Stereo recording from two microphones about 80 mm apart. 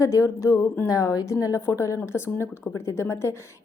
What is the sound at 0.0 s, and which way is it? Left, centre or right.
A woman's voice, left.